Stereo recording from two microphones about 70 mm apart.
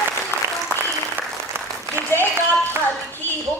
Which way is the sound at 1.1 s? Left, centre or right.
Right.